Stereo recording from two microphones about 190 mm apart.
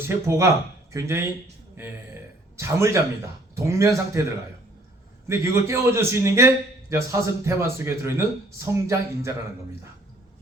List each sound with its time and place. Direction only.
0.0 s a man's voice: 15° right (ahead or behind)
5.3 s a man's voice: 15° right (ahead or behind)